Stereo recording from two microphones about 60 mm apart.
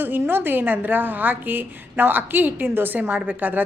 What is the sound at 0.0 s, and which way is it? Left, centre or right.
A woman's voice, right.